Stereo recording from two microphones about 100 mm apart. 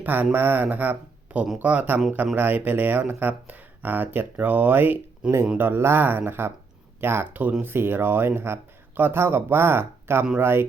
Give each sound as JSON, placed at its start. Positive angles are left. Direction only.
{"t": 0.0, "sound": "speech", "side_deg": -15}